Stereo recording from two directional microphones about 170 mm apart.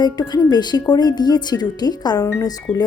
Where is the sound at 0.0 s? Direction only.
25° left (ahead or behind).